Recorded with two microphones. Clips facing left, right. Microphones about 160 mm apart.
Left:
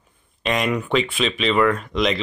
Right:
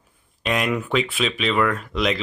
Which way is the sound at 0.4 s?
Centre (ahead or behind).